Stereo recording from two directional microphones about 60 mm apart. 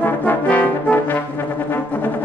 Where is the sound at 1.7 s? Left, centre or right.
Left.